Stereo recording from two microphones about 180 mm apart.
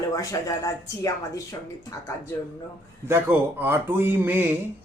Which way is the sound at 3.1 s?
10° right (ahead or behind).